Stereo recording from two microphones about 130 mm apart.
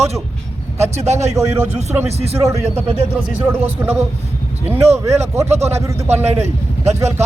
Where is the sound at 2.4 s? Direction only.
20° right (ahead or behind).